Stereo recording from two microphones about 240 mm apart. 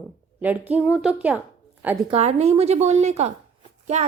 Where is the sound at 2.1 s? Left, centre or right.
Right.